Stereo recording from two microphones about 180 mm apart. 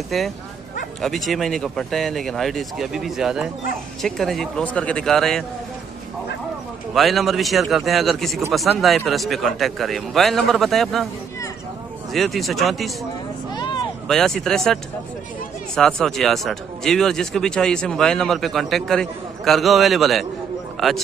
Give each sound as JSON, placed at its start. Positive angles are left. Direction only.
{"t": 0.1, "sound": "speech", "side_deg": 0}
{"t": 6.9, "sound": "speech", "side_deg": 0}
{"t": 12.1, "sound": "speech", "side_deg": 0}
{"t": 13.5, "sound": "a sound", "side_deg": 25}
{"t": 14.0, "sound": "speech", "side_deg": 5}